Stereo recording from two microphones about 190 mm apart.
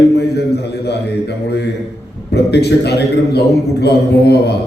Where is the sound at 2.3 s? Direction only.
60° left (ahead or behind).